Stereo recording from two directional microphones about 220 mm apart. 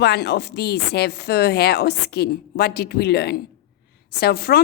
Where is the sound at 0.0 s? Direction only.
50° left (ahead or behind).